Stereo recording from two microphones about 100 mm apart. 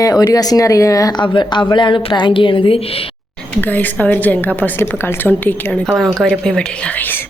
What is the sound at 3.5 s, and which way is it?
A woman's voice, 15° left (ahead or behind).